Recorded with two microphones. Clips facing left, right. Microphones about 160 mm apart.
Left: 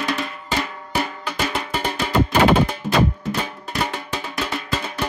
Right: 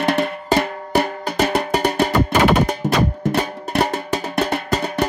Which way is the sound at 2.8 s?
45° right (ahead or behind).